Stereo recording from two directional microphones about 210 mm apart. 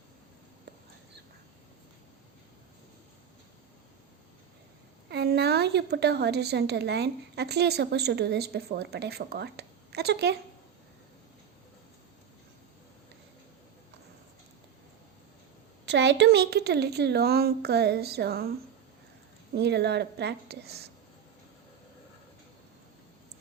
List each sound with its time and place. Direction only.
5.0 s a woman's voice: 50° right (ahead or behind)
15.9 s a woman's voice: 55° right (ahead or behind)
19.5 s a woman's voice: 50° right (ahead or behind)